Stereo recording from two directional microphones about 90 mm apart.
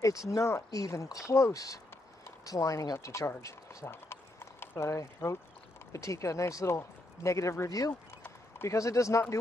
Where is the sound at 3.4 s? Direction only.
35° left (ahead or behind).